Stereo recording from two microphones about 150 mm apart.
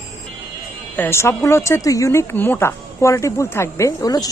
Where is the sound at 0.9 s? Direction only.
15° left (ahead or behind).